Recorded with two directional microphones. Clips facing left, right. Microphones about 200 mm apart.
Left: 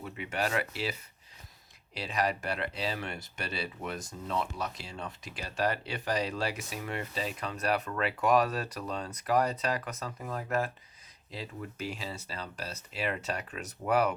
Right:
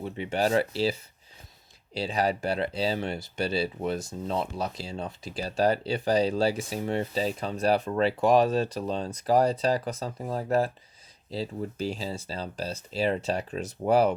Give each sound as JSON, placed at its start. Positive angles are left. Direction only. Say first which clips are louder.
{"t": 0.0, "sound": "speech", "louder": "right 6 dB", "side_deg": -30}